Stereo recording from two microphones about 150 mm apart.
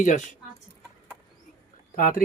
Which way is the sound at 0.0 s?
55° left (ahead or behind).